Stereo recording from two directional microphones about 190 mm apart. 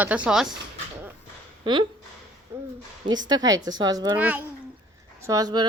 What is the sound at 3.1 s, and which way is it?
Speech, 20° right (ahead or behind).